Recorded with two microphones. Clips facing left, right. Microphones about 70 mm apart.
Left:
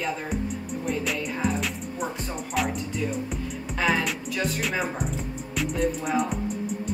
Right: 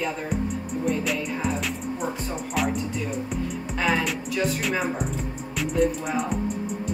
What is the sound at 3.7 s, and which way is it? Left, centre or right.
Music, centre.